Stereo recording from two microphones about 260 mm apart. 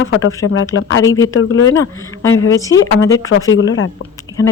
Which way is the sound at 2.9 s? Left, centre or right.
Centre.